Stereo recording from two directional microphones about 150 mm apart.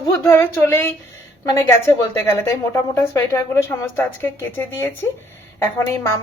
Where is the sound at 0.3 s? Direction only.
15° left (ahead or behind).